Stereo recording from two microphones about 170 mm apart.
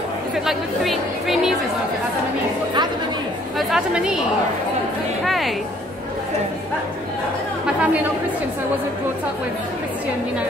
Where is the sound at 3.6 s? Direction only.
Centre (ahead or behind).